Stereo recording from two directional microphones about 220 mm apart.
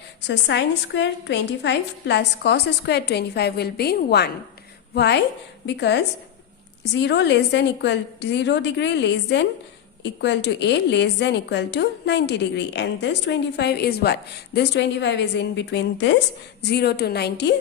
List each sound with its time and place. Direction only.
0.3 s a woman's voice: 55° left (ahead or behind)